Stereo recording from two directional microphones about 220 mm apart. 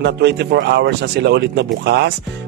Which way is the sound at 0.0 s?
50° right (ahead or behind).